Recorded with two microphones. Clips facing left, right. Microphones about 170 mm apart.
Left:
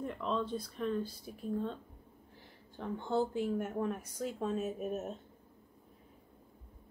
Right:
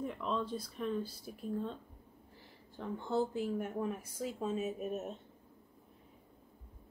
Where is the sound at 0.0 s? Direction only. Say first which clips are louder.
Left 1 dB; centre (ahead or behind).